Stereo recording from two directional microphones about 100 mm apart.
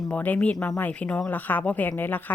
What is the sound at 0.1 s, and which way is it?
A woman's voice, 15° left (ahead or behind).